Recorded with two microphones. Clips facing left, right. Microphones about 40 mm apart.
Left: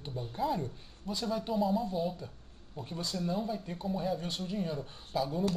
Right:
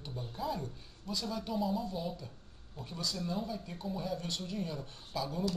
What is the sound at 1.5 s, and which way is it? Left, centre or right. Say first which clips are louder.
Speech: left 4 dB; centre.